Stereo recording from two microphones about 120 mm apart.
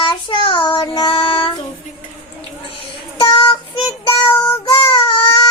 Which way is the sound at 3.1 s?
45° left (ahead or behind).